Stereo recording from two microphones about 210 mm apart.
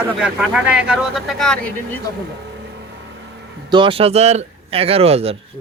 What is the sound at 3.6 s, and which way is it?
A man's voice, 25° right (ahead or behind).